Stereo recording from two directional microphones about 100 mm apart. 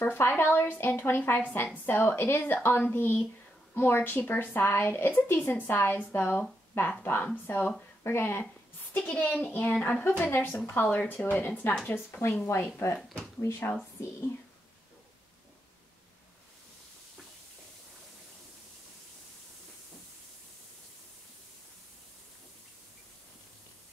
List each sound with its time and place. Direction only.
0.0 s a woman's voice: 20° left (ahead or behind)
10.0 s a woman's voice: 20° left (ahead or behind)